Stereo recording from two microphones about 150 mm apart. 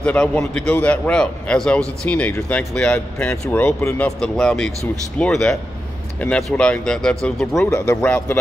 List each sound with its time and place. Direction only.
0.0 s a man's voice: 10° left (ahead or behind)
7.5 s speech: 20° left (ahead or behind)
8.0 s a man's voice: 10° left (ahead or behind)